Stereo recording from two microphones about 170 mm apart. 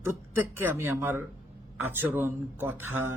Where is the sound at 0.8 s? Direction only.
15° right (ahead or behind).